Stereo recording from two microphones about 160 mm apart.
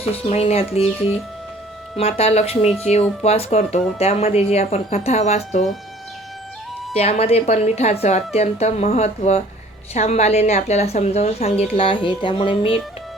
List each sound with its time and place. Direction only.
0.0 s speech: 40° left (ahead or behind)
2.0 s a woman's voice: 40° left (ahead or behind)
6.9 s a woman's voice: 40° left (ahead or behind)